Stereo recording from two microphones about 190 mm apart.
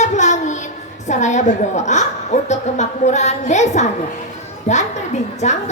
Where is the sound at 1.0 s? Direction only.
40° left (ahead or behind).